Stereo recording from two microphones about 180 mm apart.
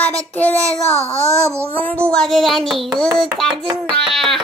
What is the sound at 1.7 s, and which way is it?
Speech, 10° left (ahead or behind).